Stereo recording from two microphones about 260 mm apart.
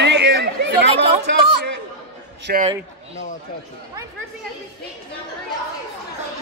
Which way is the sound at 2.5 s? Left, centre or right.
Right.